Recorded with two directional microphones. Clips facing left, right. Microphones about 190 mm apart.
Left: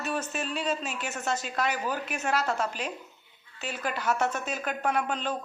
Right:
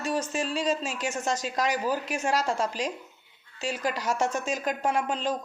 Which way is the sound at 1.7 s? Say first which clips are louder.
Right 4 dB; 10° right (ahead or behind).